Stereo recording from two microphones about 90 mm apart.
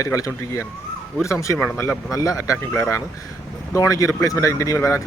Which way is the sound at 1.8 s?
35° left (ahead or behind).